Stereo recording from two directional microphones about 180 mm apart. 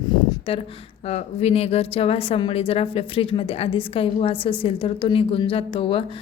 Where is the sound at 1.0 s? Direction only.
35° left (ahead or behind).